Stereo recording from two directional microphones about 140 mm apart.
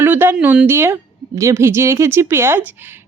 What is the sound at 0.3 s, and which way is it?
Speech, 10° right (ahead or behind).